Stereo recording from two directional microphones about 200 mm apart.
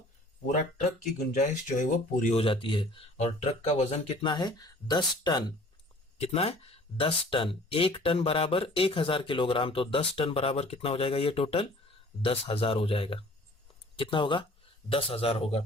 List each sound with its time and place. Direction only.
1.3 s speech: 40° left (ahead or behind)